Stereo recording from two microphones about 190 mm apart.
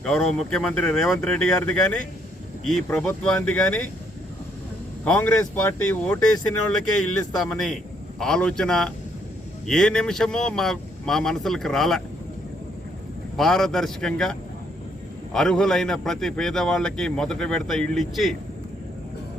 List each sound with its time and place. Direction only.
0.0 s speech: centre (ahead or behind)
5.0 s speech: 10° left (ahead or behind)
7.4 s speech: centre (ahead or behind)
13.3 s speech: centre (ahead or behind)